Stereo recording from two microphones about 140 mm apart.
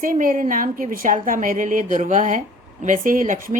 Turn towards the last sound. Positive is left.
turn(degrees=-70)  # may be behind; listen again after turning